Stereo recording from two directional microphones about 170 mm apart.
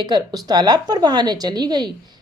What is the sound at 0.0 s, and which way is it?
A woman's voice, 25° right (ahead or behind).